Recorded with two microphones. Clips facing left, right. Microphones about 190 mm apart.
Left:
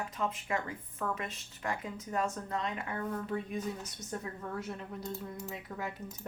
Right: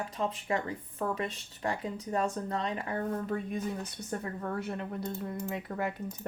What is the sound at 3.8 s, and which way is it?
Speech, 60° right (ahead or behind).